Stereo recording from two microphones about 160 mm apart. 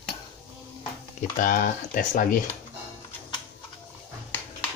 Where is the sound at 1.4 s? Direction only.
60° left (ahead or behind).